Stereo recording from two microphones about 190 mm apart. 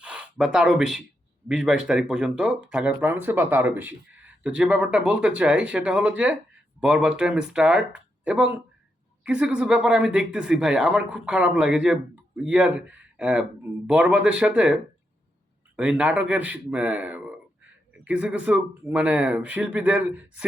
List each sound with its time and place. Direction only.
0.0 s a man's voice: 5° right (ahead or behind)